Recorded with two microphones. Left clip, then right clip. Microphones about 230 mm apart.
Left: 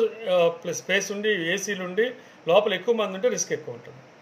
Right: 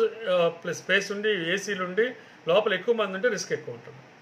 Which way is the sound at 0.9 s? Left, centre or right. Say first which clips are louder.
Left 1 dB; centre.